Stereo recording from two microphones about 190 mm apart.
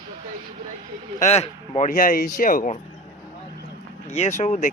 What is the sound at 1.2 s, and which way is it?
Speech, 35° left (ahead or behind).